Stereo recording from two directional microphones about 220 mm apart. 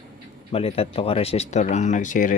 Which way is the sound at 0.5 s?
25° left (ahead or behind).